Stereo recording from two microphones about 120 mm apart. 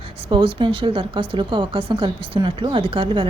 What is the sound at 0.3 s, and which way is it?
A woman's voice, 45° right (ahead or behind).